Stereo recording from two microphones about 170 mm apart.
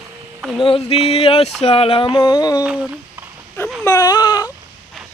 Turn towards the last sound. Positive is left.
turn(degrees=20)  # may be behind; listen again after turning